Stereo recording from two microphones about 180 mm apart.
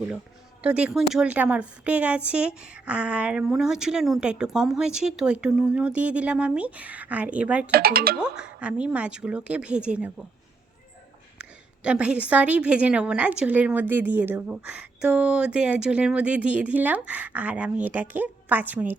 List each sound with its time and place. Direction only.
0.6 s a woman's voice: 5° right (ahead or behind)
7.7 s speech: 60° right (ahead or behind)
8.2 s a woman's voice: 5° right (ahead or behind)
11.3 s a woman's voice: 5° right (ahead or behind)